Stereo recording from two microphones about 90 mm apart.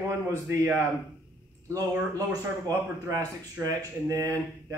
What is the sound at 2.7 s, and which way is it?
A man's voice, 40° right (ahead or behind).